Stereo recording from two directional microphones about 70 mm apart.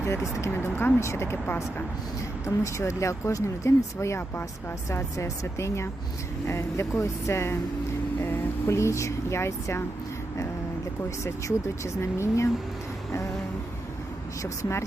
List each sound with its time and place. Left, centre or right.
0.0 s speech: left
0.5 s speech: left
2.7 s speech: left
11.2 s speech: left
14.6 s speech: left